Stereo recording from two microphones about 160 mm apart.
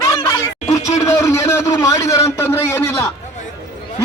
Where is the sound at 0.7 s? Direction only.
20° left (ahead or behind).